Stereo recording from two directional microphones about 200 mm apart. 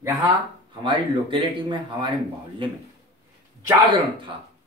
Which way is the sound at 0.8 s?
25° right (ahead or behind).